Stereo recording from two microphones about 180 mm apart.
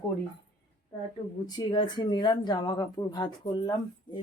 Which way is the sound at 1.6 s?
25° left (ahead or behind).